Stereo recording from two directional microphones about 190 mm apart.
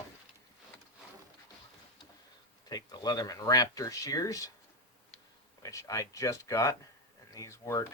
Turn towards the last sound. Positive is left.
turn(degrees=15)  # may be behind; listen again after turning